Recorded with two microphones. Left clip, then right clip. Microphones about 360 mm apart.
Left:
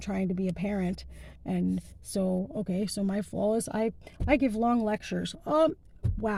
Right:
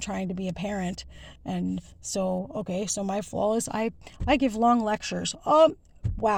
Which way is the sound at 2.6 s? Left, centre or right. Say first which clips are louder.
Right 3 dB; right.